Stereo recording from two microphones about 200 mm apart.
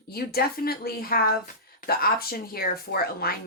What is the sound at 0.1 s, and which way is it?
Speech, 50° left (ahead or behind).